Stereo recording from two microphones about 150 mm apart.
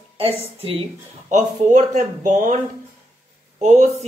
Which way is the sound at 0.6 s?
40° right (ahead or behind).